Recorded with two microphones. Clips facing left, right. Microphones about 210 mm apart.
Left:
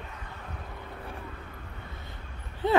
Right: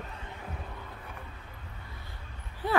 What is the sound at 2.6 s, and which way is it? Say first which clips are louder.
Speech: left 4 dB; 20° left (ahead or behind).